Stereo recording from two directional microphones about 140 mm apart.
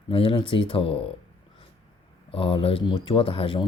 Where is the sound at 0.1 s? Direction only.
40° left (ahead or behind).